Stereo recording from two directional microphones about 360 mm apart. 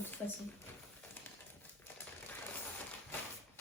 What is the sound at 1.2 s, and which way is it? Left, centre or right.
Bird, centre.